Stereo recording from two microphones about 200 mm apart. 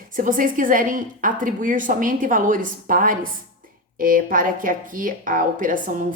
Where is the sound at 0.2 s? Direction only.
40° right (ahead or behind).